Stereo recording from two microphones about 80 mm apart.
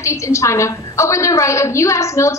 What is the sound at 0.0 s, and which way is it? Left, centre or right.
A woman's voice, left.